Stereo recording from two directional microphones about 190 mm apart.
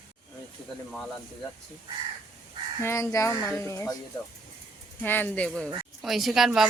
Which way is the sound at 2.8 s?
15° left (ahead or behind).